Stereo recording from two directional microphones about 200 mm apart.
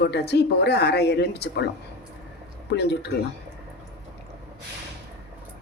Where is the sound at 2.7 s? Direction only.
55° left (ahead or behind).